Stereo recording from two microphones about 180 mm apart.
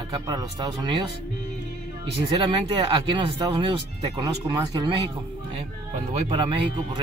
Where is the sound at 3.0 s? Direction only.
25° right (ahead or behind).